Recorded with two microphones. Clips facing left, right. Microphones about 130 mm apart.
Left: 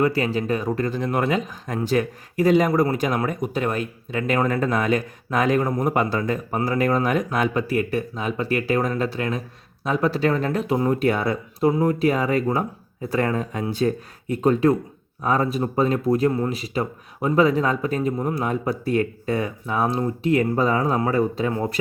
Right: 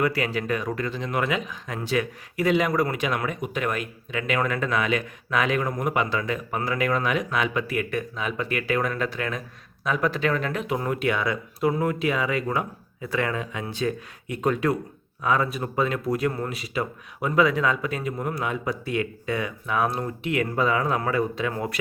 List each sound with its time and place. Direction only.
0.1 s speech: 35° left (ahead or behind)